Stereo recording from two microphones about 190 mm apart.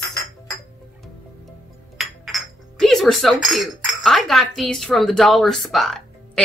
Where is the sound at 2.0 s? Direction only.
Centre (ahead or behind).